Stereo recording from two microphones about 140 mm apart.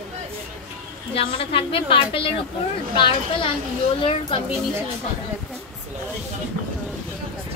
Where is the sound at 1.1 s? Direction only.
40° left (ahead or behind).